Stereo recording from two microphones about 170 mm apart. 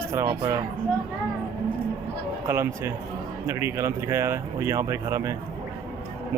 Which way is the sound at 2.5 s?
15° right (ahead or behind).